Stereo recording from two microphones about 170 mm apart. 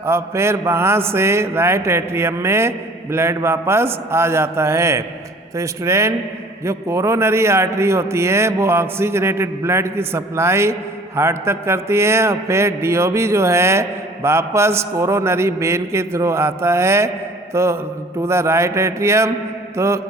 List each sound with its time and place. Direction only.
0.0 s a man's voice: 15° right (ahead or behind)
17.5 s mantra: 15° right (ahead or behind)
18.2 s a man's voice: 15° right (ahead or behind)